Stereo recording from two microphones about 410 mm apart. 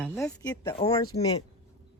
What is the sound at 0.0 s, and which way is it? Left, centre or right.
Speech, centre.